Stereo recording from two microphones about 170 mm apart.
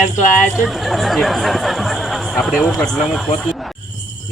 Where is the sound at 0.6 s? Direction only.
Centre (ahead or behind).